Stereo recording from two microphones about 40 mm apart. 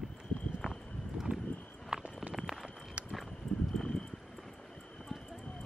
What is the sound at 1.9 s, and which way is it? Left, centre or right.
Walk, right.